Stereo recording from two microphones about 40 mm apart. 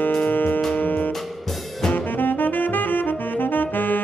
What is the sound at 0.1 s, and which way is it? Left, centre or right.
Music, left.